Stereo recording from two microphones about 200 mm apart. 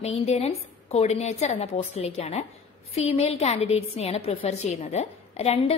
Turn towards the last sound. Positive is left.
turn(degrees=30)  # may be behind; listen again after turning